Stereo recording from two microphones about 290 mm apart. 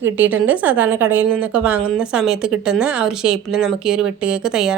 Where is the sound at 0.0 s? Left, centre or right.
Centre.